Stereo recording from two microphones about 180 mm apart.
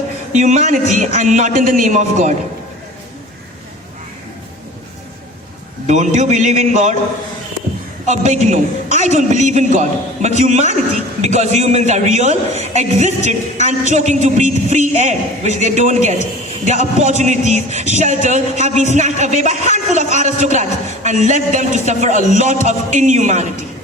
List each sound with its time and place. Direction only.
0.3 s a man's voice: 40° right (ahead or behind)
5.9 s speech: 40° right (ahead or behind)
8.0 s speech: 40° right (ahead or behind)